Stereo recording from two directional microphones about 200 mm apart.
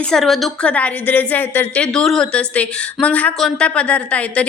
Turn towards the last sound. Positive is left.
turn(degrees=5)  # may be behind; listen again after turning